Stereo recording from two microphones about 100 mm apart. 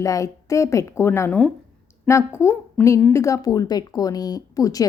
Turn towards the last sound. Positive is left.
turn(degrees=35)  # may be behind; listen again after turning